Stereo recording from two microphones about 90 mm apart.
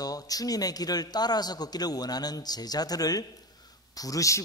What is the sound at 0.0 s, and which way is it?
A man's voice, 45° left (ahead or behind).